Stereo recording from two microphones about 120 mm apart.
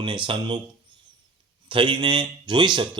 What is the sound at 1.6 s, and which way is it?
Speech, 45° right (ahead or behind).